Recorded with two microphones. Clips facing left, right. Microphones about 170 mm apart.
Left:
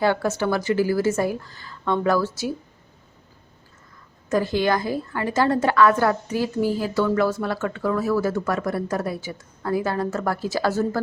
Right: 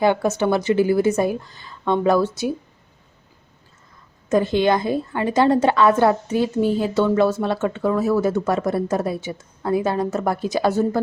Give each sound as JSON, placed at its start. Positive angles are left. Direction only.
{"t": 0.0, "sound": "speech", "side_deg": -20}
{"t": 4.3, "sound": "speech", "side_deg": -20}